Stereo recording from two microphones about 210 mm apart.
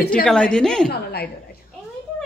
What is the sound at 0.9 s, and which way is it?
Speech, 50° left (ahead or behind).